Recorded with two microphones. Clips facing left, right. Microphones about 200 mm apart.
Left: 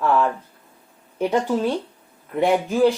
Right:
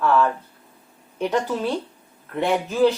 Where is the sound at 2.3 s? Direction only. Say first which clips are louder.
Left 3 dB; 10° left (ahead or behind).